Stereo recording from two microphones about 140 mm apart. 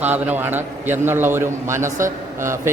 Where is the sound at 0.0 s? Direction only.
15° right (ahead or behind).